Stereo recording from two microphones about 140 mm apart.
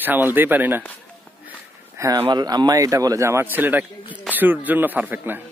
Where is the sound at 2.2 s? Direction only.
30° right (ahead or behind).